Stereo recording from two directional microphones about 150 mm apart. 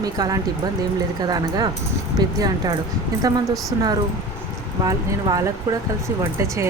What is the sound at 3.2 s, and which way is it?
Speech, 25° right (ahead or behind).